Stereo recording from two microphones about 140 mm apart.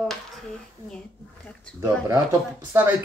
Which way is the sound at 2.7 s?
15° right (ahead or behind).